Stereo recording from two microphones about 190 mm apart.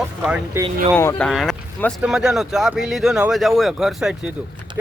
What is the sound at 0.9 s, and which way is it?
Speech, 10° left (ahead or behind).